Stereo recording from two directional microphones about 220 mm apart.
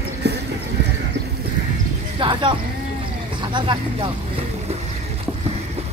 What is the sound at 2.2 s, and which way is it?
Speech, 20° right (ahead or behind).